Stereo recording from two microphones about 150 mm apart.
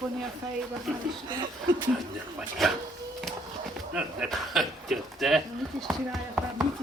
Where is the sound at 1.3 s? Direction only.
30° right (ahead or behind).